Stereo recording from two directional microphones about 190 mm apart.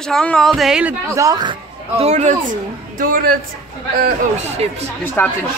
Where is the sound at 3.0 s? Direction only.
50° right (ahead or behind).